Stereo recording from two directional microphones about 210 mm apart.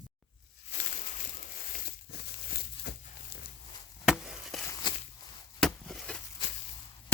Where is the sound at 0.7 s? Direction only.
40° left (ahead or behind).